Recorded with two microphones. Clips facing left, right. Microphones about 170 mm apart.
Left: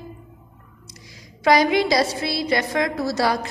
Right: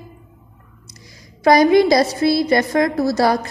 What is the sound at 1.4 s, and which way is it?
A woman's voice, 45° right (ahead or behind).